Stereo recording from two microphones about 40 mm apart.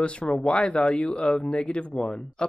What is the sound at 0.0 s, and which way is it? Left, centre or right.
Speech, left.